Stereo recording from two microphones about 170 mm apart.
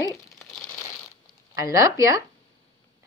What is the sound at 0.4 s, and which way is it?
Crumpling, 10° left (ahead or behind).